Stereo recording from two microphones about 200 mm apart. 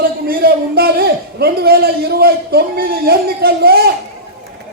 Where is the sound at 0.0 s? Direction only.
50° right (ahead or behind).